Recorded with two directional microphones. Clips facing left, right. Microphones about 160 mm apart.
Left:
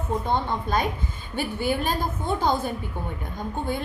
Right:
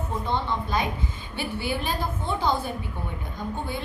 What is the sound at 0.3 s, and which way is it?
A woman's voice, 50° left (ahead or behind).